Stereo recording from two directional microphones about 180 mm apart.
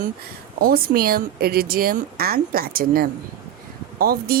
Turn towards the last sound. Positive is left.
turn(degrees=-55)  # may be behind; listen again after turning